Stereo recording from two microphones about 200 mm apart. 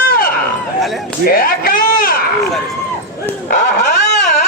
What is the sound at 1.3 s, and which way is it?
Speech, 45° left (ahead or behind).